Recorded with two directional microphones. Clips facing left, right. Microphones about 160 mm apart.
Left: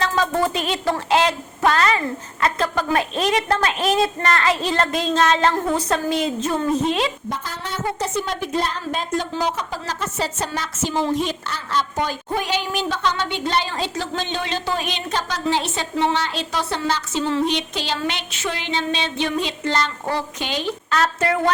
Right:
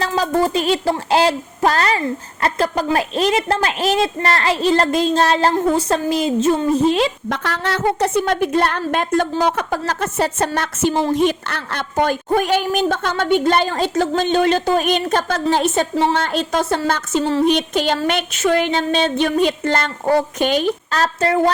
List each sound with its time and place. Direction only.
0.2 s a woman's voice: 35° right (ahead or behind)
7.3 s a woman's voice: 80° right; by 20.7 s 50° right (ahead or behind)
20.9 s a woman's voice: 35° right (ahead or behind)